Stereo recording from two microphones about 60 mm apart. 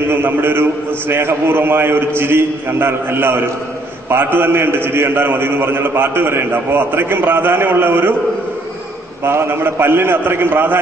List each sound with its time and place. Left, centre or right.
0.1 s a man's voice: right
9.2 s a man's voice: right